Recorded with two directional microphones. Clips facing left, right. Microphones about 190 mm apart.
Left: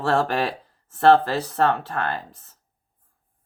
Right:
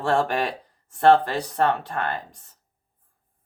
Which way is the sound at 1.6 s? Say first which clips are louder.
Left 1 dB; 15° right (ahead or behind).